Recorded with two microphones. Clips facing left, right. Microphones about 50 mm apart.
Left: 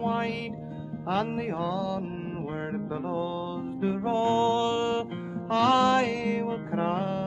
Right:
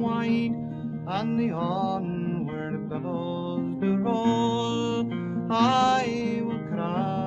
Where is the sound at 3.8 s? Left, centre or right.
Centre; by 6.4 s left.